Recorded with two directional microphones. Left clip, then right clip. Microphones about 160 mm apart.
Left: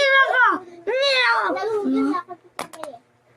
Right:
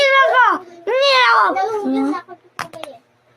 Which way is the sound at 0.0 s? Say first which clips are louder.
Right 4 dB; 25° left (ahead or behind).